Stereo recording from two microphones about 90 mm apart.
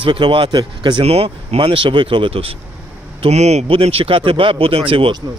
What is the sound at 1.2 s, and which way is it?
Speech, 90° right.